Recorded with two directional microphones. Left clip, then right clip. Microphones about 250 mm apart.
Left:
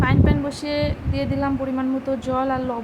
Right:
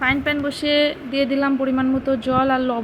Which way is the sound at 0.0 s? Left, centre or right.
Centre.